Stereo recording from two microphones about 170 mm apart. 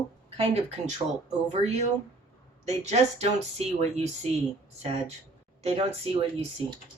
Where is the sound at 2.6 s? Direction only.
40° right (ahead or behind).